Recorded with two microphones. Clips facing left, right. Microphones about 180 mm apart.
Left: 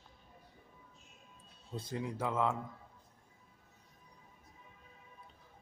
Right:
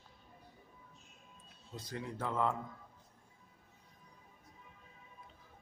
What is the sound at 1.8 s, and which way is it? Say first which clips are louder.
Speech: left 4 dB; 25° left (ahead or behind).